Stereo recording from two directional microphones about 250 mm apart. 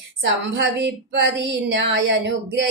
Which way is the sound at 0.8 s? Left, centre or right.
Right.